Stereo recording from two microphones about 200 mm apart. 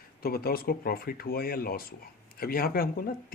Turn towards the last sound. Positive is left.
turn(degrees=45)  # may be behind; listen again after turning